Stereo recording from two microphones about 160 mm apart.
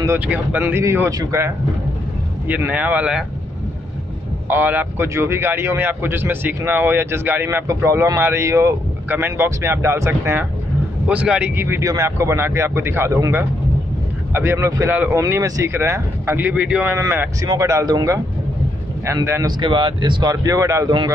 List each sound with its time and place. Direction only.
0.0 s a man's voice: 15° right (ahead or behind)
4.5 s a man's voice: 10° right (ahead or behind)
17.5 s a man's voice: 20° right (ahead or behind)
19.6 s speech: 30° right (ahead or behind)